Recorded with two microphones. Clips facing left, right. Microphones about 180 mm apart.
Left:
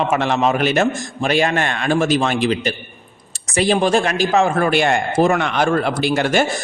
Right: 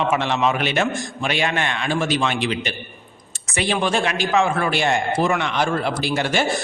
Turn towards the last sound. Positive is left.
turn(degrees=50)  # may be behind; listen again after turning